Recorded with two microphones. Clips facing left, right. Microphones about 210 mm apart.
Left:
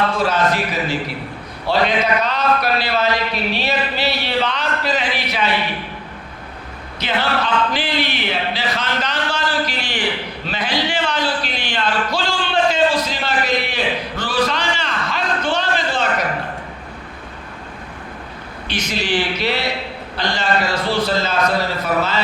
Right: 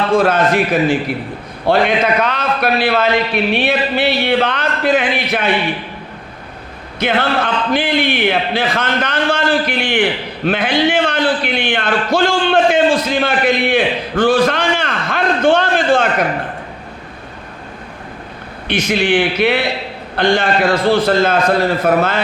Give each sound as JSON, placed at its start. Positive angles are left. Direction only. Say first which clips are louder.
{"t": 0.1, "sound": "a man's voice", "louder": "right 6 dB", "side_deg": -55}
{"t": 7.0, "sound": "speech", "louder": "right 5 dB", "side_deg": -50}
{"t": 18.7, "sound": "a man's voice", "louder": "right 7 dB", "side_deg": -55}